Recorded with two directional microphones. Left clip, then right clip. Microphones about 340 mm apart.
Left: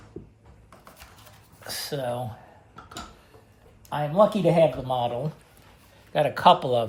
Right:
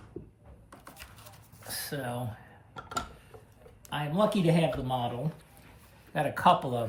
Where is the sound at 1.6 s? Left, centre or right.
Centre.